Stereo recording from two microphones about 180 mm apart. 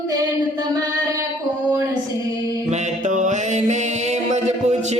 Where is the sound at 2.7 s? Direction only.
45° right (ahead or behind).